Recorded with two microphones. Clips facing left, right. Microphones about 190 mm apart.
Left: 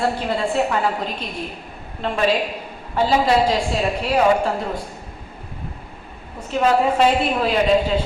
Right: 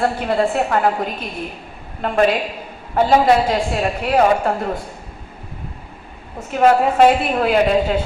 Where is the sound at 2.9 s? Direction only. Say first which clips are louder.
Right 3 dB; 55° right (ahead or behind).